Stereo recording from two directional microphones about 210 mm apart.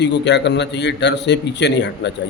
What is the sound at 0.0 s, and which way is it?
A man's voice, 55° left (ahead or behind).